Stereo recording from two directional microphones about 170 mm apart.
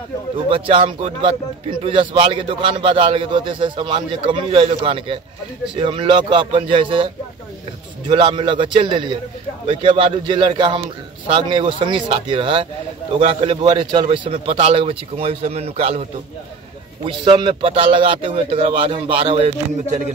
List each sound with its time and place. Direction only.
0.5 s a man's voice: 30° right (ahead or behind)
8.1 s a man's voice: 30° right (ahead or behind)